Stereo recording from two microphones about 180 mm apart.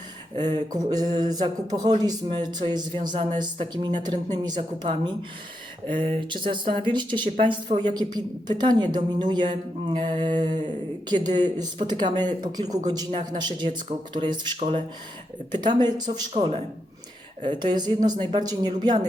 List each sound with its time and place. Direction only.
0.3 s speech: 25° right (ahead or behind)